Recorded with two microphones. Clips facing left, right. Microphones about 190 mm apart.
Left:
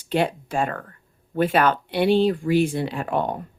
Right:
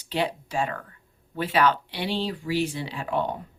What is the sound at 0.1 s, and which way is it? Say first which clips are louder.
Speech: left 5 dB; 50° left (ahead or behind).